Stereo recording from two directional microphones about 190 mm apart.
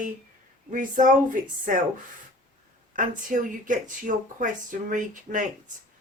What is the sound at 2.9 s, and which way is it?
Speech, 45° right (ahead or behind).